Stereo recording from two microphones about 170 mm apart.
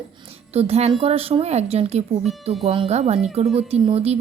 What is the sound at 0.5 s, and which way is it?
Speech, 35° right (ahead or behind).